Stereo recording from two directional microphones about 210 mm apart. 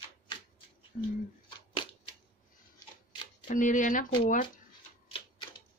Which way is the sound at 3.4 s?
40° left (ahead or behind).